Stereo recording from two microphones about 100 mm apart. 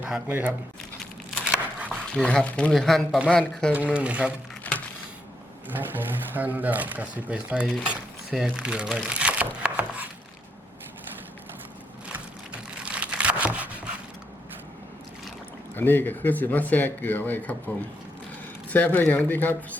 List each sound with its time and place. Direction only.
0.0 s speech: 20° right (ahead or behind)
1.9 s a man's voice: 10° left (ahead or behind)
3.9 s speech: 10° right (ahead or behind)
4.7 s music: 15° left (ahead or behind)
5.6 s speech: 20° right (ahead or behind)
7.9 s a sound: 10° right (ahead or behind)
8.6 s speech: 10° right (ahead or behind)
9.0 s crumpling: 10° right (ahead or behind)
12.8 s a sound: 10° right (ahead or behind)
15.7 s speech: 20° left (ahead or behind)
18.7 s a man's voice: 15° left (ahead or behind)